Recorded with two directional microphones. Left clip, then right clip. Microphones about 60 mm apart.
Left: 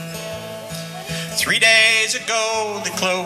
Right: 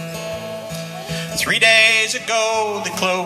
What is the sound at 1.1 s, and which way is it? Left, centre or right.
Music, right.